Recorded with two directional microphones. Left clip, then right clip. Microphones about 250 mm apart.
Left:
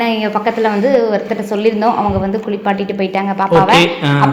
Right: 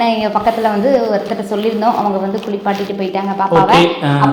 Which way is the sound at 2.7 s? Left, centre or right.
Left.